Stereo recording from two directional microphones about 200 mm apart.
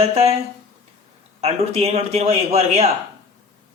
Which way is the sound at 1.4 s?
30° right (ahead or behind).